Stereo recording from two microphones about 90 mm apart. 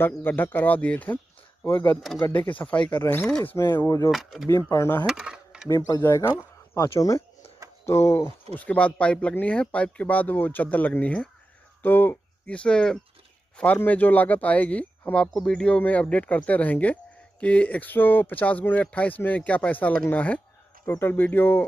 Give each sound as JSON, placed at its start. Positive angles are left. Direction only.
{"t": 0.0, "sound": "speech", "side_deg": 25}
{"t": 3.5, "sound": "speech", "side_deg": 30}
{"t": 4.1, "sound": "speech", "side_deg": 0}
{"t": 4.5, "sound": "speech", "side_deg": 35}
{"t": 5.0, "sound": "a sound", "side_deg": -10}
{"t": 5.7, "sound": "speech", "side_deg": 35}
{"t": 8.5, "sound": "speech", "side_deg": 15}
{"t": 13.7, "sound": "speech", "side_deg": 20}
{"t": 20.1, "sound": "a sound", "side_deg": 15}
{"t": 21.0, "sound": "speech", "side_deg": 20}